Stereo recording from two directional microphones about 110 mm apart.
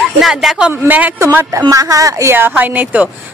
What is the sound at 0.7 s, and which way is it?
Speech, 15° right (ahead or behind).